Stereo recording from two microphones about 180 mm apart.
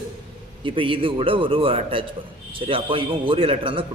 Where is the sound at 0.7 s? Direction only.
30° right (ahead or behind).